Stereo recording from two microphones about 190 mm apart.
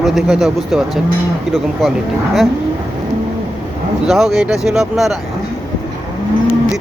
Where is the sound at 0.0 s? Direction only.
Centre (ahead or behind).